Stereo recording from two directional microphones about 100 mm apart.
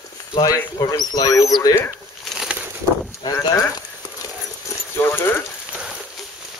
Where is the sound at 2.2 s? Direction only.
5° right (ahead or behind).